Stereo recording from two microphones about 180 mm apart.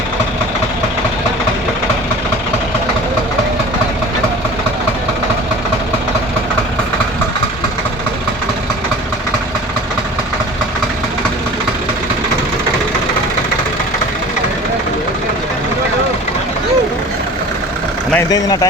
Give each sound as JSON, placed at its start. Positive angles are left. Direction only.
{"t": 18.1, "sound": "vehicle", "side_deg": 15}